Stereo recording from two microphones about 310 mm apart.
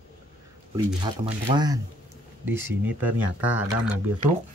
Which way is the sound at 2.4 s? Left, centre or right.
Centre.